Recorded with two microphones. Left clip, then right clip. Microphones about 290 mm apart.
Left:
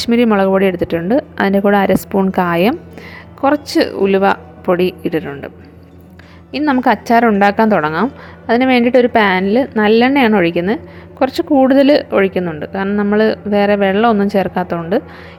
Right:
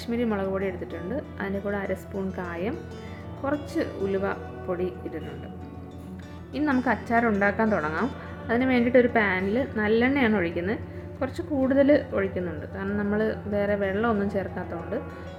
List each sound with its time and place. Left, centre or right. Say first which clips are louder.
0.0 s speech: left 15 dB; left
6.5 s a woman's voice: left 12 dB; left